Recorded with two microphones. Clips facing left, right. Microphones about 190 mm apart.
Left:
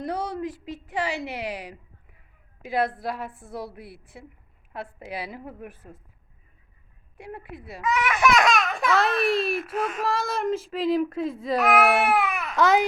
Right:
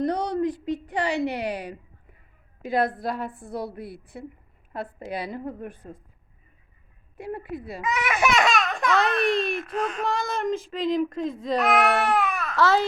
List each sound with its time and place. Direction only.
0.0 s a sound: 5° left (ahead or behind)
2.6 s speech: centre (ahead or behind)
7.2 s speech: centre (ahead or behind)
7.9 s speech: 15° right (ahead or behind)
8.3 s speech: centre (ahead or behind)
11.9 s speech: 15° left (ahead or behind)
12.2 s baby cry: 15° left (ahead or behind)